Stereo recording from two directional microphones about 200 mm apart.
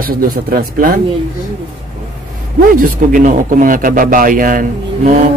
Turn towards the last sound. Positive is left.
turn(degrees=-45)  # may be behind; listen again after turning